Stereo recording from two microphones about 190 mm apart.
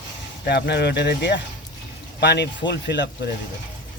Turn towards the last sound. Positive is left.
turn(degrees=60)  # may be behind; listen again after turning